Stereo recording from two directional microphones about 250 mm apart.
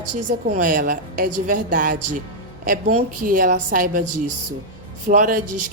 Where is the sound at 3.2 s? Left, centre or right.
Right.